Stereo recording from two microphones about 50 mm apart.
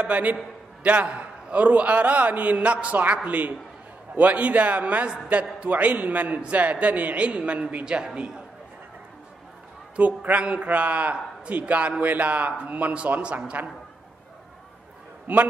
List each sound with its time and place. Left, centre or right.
0.0 s a man's voice: right
9.9 s a man's voice: right
15.3 s a man's voice: right